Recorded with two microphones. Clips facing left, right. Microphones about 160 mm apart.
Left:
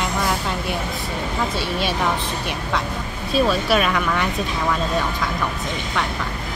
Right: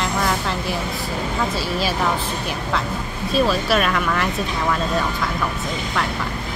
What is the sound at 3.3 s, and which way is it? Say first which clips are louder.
Speech: even; centre (ahead or behind).